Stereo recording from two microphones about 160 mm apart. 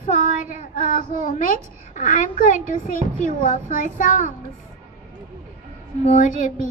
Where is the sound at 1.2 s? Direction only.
55° left (ahead or behind).